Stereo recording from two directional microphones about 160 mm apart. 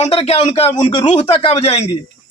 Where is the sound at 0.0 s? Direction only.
40° left (ahead or behind).